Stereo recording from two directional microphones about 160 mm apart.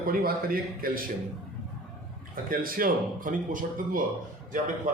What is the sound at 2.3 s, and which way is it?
A man's voice, 60° right (ahead or behind).